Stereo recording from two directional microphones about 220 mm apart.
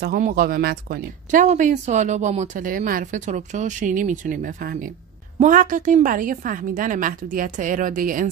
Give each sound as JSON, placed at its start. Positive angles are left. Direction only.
{"t": 0.0, "sound": "speech", "side_deg": -45}